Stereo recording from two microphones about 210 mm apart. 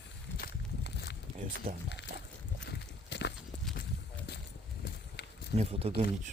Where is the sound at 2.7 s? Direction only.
55° left (ahead or behind).